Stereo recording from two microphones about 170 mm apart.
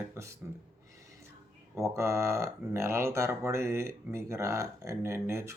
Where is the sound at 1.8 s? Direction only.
15° right (ahead or behind).